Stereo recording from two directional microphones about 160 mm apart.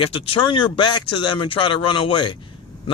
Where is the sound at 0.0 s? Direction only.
35° left (ahead or behind).